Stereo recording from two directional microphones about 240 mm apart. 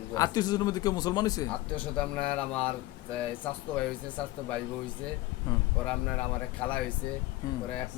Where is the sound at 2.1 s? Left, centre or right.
Centre.